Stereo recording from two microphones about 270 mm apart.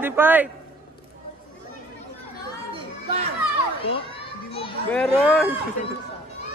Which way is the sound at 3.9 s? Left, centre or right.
Centre.